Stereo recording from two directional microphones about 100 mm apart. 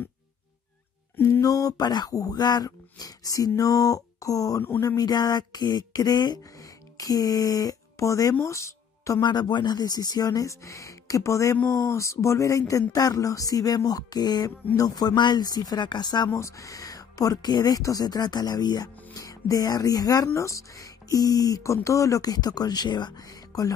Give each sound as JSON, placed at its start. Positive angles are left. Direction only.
{"t": 1.4, "sound": "speech", "side_deg": 35}
{"t": 9.2, "sound": "speech", "side_deg": 45}
{"t": 16.3, "sound": "speech", "side_deg": 30}